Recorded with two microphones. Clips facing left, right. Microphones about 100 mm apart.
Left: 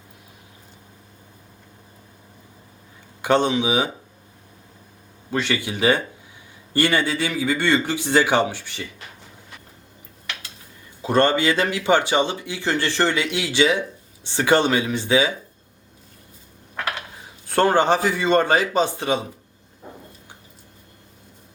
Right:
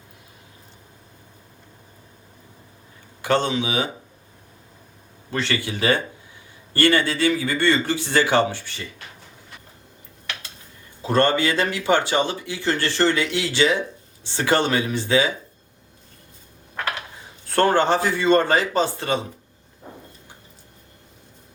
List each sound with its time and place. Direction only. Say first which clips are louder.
3.2 s speech: left 2 dB; 20° left (ahead or behind)
5.3 s speech: left 1 dB; 15° left (ahead or behind)
11.0 s speech: left 1 dB; 15° left (ahead or behind)
17.5 s speech: left 1 dB; 15° left (ahead or behind)